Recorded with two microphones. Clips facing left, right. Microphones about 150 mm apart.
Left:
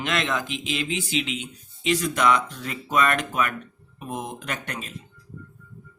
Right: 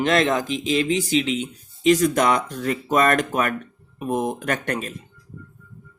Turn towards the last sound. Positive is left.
turn(degrees=-50)  # may be behind; listen again after turning